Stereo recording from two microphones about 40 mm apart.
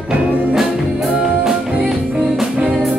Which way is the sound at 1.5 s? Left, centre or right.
Right.